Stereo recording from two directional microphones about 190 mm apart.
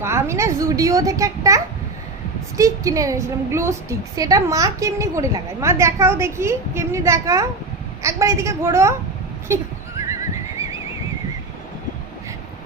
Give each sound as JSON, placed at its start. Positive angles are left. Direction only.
{"t": 0.0, "sound": "a woman's voice", "side_deg": -15}